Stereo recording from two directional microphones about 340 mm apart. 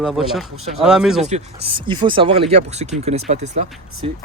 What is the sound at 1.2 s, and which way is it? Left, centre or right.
Speech, centre.